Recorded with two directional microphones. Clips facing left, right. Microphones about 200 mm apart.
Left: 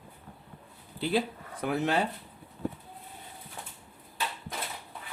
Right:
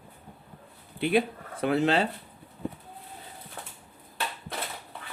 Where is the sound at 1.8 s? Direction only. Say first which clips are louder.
Right 2 dB; 70° right (ahead or behind).